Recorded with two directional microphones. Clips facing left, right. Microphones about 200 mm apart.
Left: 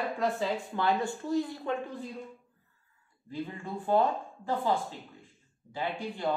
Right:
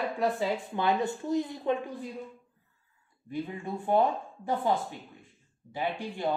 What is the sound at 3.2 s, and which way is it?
A woman's voice, 20° right (ahead or behind).